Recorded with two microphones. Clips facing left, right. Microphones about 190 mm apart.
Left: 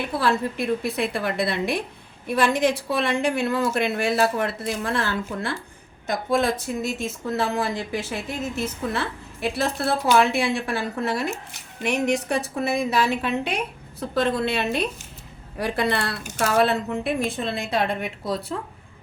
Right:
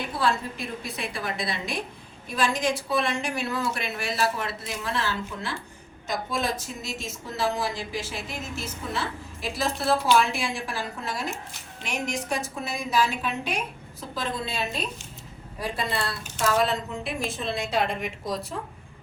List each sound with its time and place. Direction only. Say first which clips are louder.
0.2 s a woman's voice: left 3 dB; 60° left (ahead or behind)